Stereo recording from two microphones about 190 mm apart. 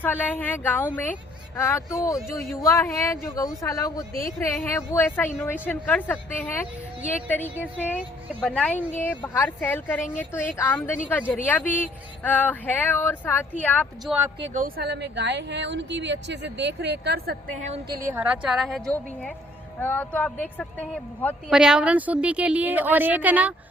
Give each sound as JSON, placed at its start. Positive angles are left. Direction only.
{"t": 0.0, "sound": "speech", "side_deg": 10}
{"t": 4.1, "sound": "speech", "side_deg": 50}
{"t": 4.4, "sound": "speech", "side_deg": 15}
{"t": 14.8, "sound": "speech", "side_deg": -60}
{"t": 17.9, "sound": "a woman's voice", "side_deg": -15}
{"t": 18.7, "sound": "a woman's voice", "side_deg": 5}
{"t": 21.5, "sound": "a woman's voice", "side_deg": -5}